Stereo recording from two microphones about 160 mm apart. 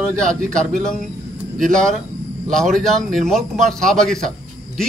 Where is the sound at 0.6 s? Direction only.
5° left (ahead or behind).